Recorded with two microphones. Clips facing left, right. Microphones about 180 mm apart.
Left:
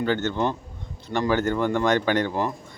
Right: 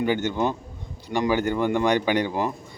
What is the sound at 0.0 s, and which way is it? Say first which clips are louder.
Speech: right 1 dB; 10° right (ahead or behind).